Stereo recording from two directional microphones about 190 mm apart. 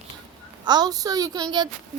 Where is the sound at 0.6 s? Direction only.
20° right (ahead or behind).